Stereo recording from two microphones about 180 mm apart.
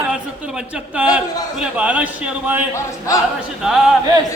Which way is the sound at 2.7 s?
20° left (ahead or behind).